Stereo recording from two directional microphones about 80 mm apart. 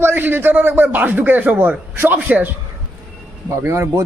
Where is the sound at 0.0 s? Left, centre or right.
Right.